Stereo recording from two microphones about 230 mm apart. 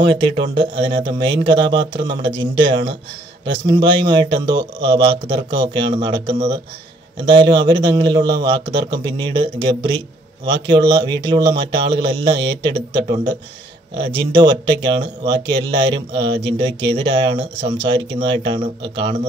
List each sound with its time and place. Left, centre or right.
0.1 s a man's voice: right